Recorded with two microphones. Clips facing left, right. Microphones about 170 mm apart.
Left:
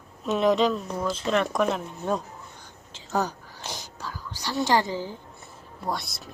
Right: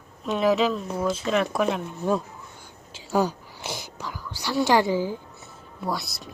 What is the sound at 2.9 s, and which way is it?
Whispering, 10° right (ahead or behind).